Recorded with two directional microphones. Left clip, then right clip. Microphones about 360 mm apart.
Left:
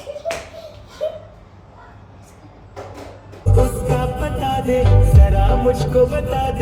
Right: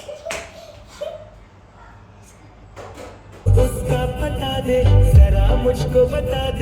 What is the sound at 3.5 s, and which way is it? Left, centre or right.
Music, centre.